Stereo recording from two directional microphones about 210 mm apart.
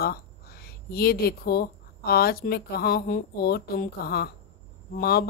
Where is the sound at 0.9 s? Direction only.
45° left (ahead or behind).